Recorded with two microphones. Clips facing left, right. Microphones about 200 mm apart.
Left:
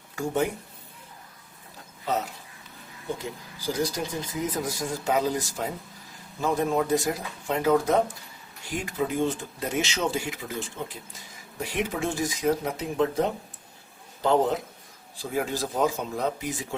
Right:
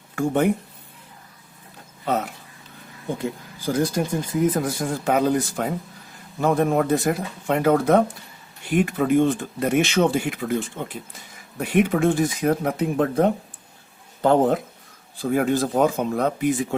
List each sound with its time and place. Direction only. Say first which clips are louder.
0.2 s speech: right 6 dB; 55° right (ahead or behind)
2.0 s speech: right 4 dB; 60° right (ahead or behind)
3.7 s speech: right 6 dB; 50° right (ahead or behind)